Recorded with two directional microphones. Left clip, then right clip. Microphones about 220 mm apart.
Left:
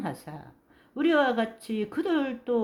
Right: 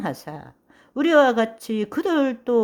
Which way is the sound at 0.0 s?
45° right (ahead or behind).